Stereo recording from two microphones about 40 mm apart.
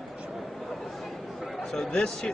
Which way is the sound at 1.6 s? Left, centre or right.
Centre.